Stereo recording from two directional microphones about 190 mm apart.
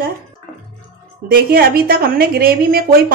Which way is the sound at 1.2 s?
50° right (ahead or behind).